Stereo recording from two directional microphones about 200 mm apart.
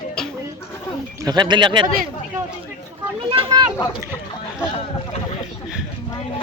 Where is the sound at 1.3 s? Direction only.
20° right (ahead or behind).